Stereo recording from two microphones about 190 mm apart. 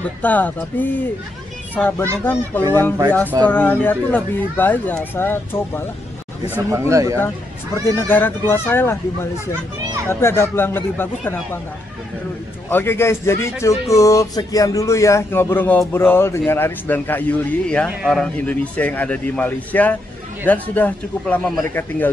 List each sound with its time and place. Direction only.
0.2 s speech: 10° left (ahead or behind)
3.1 s speech: 10° left (ahead or behind)
6.5 s speech: 15° right (ahead or behind)
8.1 s speech: 10° left (ahead or behind)
12.6 s speech: 10° left (ahead or behind)